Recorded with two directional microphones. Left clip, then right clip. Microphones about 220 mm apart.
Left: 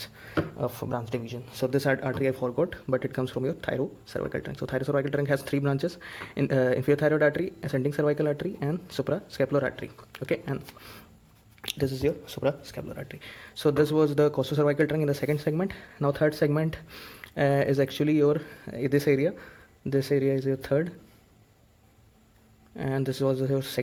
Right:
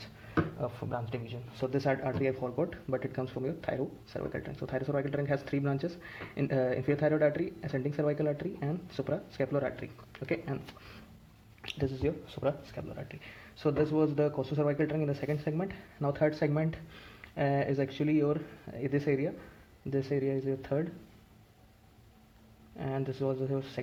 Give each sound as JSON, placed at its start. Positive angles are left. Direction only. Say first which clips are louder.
{"t": 0.6, "sound": "speech", "louder": "left 5 dB", "side_deg": 40}
{"t": 22.8, "sound": "speech", "louder": "left 6 dB", "side_deg": 50}